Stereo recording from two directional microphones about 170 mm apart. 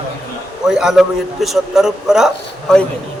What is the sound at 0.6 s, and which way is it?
A man's voice, 5° right (ahead or behind).